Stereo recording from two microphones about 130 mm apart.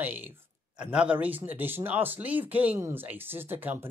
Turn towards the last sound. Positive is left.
turn(degrees=-15)  # may be behind; listen again after turning